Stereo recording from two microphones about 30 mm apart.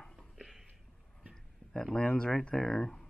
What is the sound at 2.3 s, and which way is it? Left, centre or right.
Speech, centre.